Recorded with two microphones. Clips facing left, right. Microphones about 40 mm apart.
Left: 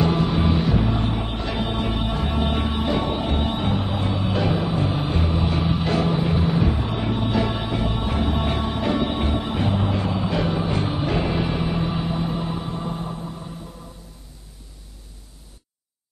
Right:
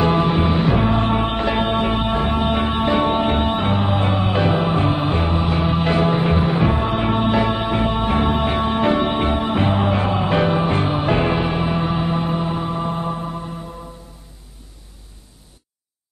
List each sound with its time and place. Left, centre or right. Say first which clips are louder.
0.0 s music: right 4 dB; right
2.2 s music: right 5 dB; centre
5.4 s music: right 3 dB; centre
5.7 s music: right 5 dB; right
7.3 s music: right 5 dB; right
12.6 s mantra: right 6 dB; right